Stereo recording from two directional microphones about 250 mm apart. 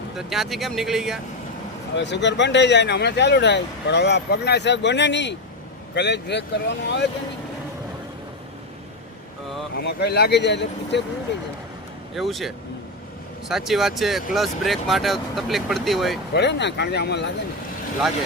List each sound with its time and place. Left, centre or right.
0.2 s speech: centre
2.0 s speech: left
9.7 s speech: left
12.1 s speech: centre
16.3 s speech: left